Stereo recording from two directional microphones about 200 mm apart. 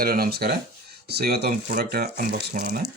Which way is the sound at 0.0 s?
50° right (ahead or behind).